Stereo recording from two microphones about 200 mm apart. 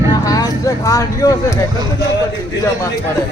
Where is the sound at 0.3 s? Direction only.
20° left (ahead or behind).